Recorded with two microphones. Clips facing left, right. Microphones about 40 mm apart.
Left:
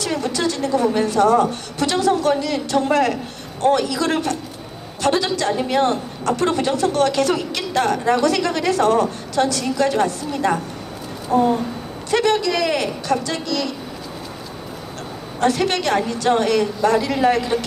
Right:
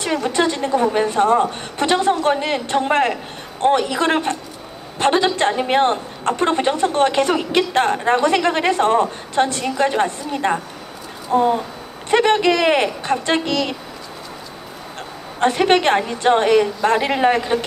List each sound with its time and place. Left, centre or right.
0.3 s a woman's voice: right
7.7 s a woman's voice: right
12.4 s a woman's voice: right
15.4 s a woman's voice: right
16.8 s a woman's voice: right